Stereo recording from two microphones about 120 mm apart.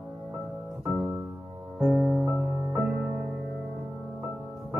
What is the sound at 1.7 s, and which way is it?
Music, 10° right (ahead or behind).